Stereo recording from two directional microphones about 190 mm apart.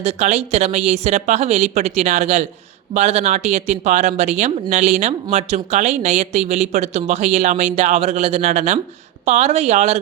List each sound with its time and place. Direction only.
0.0 s speech: 35° right (ahead or behind)